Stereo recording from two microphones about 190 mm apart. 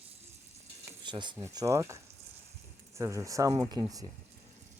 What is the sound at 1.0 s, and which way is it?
Speech, 25° right (ahead or behind).